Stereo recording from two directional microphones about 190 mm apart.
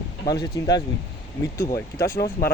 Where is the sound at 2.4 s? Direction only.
50° left (ahead or behind).